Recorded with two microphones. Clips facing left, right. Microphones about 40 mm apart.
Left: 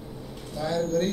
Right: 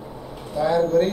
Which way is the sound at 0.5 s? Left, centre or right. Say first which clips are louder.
Right 8 dB; centre.